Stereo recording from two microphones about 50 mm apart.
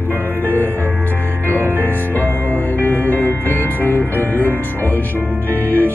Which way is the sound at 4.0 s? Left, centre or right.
Right.